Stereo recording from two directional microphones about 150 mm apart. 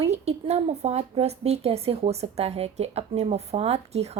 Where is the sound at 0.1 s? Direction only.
45° right (ahead or behind).